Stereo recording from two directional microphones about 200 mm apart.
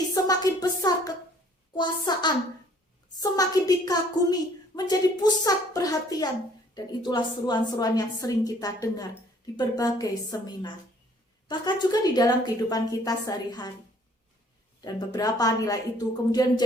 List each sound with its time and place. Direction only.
0.1 s a woman's voice: 20° left (ahead or behind)
14.8 s a woman's voice: 20° left (ahead or behind)